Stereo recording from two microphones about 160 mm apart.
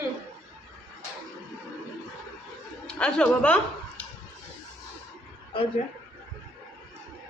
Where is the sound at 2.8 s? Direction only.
5° left (ahead or behind).